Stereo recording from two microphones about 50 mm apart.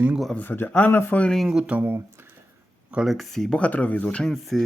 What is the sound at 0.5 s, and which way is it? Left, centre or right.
Speech, left.